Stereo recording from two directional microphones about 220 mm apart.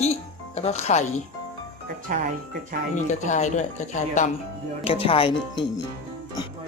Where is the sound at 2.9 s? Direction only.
35° left (ahead or behind).